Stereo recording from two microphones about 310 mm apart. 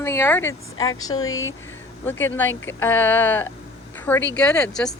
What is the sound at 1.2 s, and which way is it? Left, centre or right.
Speech, left.